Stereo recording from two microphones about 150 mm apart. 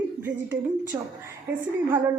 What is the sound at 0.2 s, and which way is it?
Speech, 10° right (ahead or behind).